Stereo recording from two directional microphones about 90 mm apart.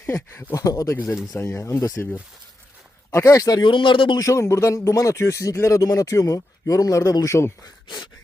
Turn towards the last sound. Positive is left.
turn(degrees=35)  # may be behind; listen again after turning